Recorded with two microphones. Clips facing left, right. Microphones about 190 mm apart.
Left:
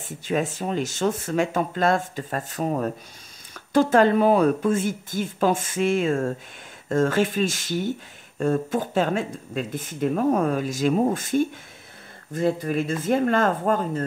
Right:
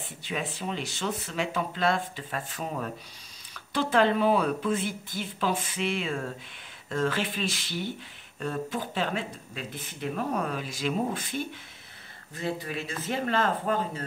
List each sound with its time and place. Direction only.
0.0 s speech: 45° left (ahead or behind)